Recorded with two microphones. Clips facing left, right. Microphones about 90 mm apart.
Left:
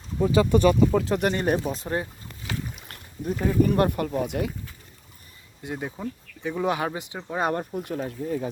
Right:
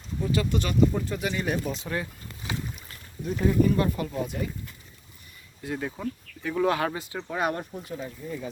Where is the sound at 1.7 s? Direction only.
30° left (ahead or behind).